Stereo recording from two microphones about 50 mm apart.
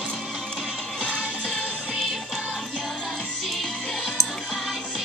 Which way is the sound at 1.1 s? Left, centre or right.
Right.